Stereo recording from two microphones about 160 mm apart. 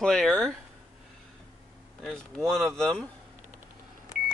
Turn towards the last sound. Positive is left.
turn(degrees=25)  # may be behind; listen again after turning